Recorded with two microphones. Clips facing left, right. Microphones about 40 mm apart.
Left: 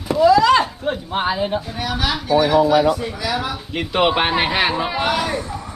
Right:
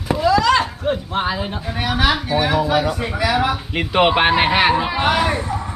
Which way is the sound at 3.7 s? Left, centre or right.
Centre.